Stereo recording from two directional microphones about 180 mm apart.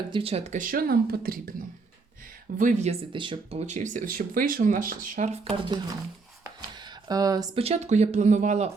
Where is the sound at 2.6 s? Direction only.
40° right (ahead or behind).